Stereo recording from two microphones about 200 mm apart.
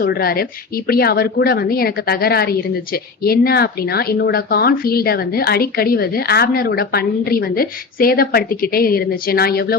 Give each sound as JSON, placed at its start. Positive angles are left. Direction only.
{"t": 0.0, "sound": "a woman's voice", "side_deg": 50}